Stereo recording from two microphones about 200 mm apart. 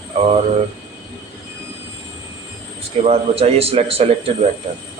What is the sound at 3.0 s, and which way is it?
A man's voice, 30° right (ahead or behind).